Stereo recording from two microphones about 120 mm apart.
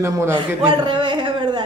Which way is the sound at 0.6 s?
45° right (ahead or behind).